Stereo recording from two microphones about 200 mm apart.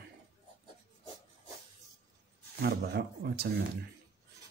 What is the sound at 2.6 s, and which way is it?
Speech, 55° right (ahead or behind).